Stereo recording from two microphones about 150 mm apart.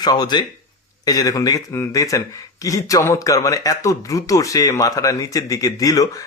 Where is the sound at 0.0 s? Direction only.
30° left (ahead or behind).